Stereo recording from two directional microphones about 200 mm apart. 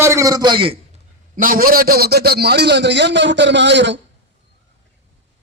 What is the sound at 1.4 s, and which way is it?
A man's voice, 45° right (ahead or behind).